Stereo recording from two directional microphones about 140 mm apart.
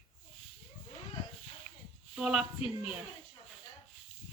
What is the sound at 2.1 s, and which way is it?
Speech, 5° right (ahead or behind).